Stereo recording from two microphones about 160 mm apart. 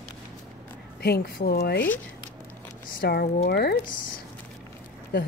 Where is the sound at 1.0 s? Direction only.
75° left (ahead or behind).